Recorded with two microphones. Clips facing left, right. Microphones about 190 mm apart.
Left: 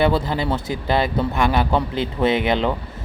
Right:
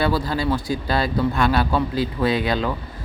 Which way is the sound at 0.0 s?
20° left (ahead or behind).